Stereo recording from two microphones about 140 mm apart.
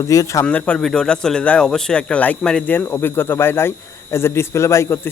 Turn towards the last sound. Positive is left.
turn(degrees=15)  # may be behind; listen again after turning